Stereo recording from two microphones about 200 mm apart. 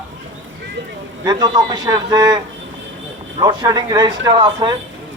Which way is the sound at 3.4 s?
20° right (ahead or behind).